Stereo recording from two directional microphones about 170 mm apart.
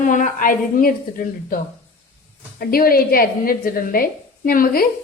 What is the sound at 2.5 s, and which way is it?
A woman's voice, 60° left (ahead or behind).